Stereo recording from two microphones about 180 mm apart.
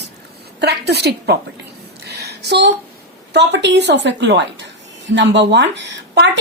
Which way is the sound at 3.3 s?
75° right (ahead or behind).